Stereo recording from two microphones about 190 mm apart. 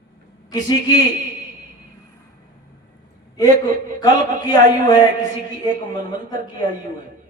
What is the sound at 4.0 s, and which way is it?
Speech, 20° left (ahead or behind).